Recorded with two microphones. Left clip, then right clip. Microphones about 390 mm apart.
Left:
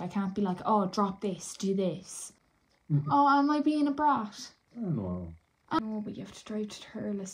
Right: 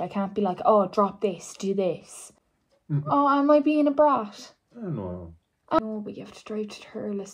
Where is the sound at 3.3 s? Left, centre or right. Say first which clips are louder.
Right 6 dB; centre.